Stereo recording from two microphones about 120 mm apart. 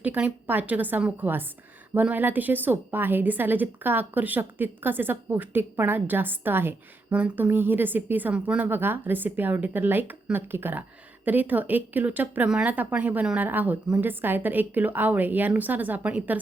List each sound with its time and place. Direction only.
0.0 s a woman's voice: 10° right (ahead or behind)